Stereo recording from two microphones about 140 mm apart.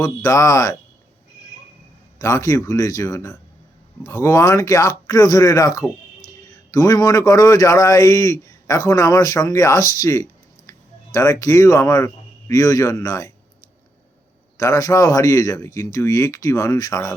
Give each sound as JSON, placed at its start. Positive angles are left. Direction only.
{"t": 0.0, "sound": "speech", "side_deg": 25}
{"t": 2.1, "sound": "speech", "side_deg": 20}
{"t": 14.6, "sound": "speech", "side_deg": 25}